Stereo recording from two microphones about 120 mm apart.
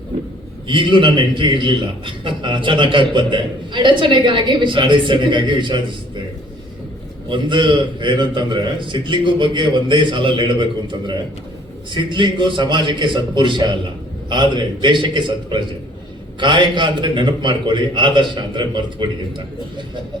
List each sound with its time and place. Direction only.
0.7 s a man's voice: 45° right (ahead or behind)
7.3 s a man's voice: 40° right (ahead or behind)